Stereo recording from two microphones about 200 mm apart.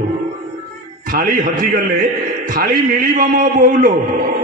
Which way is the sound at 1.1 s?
45° right (ahead or behind).